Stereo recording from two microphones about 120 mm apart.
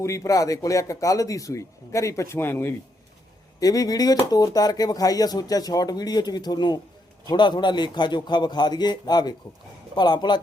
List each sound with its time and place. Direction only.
0.0 s speech: 25° left (ahead or behind)
3.6 s speech: 30° left (ahead or behind)